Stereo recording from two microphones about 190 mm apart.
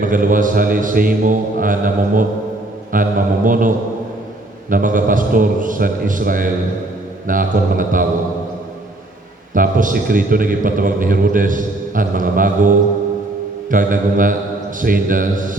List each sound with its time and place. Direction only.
0.0 s a man's voice: 45° right (ahead or behind)
9.6 s a man's voice: 45° right (ahead or behind)